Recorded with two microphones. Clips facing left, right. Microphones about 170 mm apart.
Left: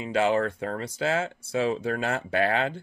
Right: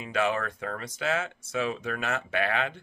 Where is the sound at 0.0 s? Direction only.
30° left (ahead or behind).